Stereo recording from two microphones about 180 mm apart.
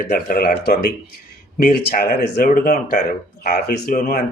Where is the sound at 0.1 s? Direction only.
55° left (ahead or behind).